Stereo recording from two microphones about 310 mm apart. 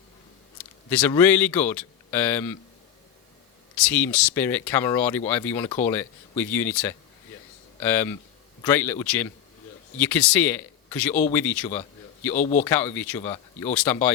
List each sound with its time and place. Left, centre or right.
0.9 s speech: centre
3.8 s speech: centre